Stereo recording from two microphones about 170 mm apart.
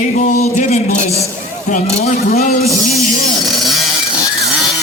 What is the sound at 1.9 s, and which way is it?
Speech, 40° left (ahead or behind).